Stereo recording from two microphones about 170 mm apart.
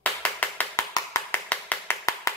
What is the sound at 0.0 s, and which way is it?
Clapping, 10° left (ahead or behind).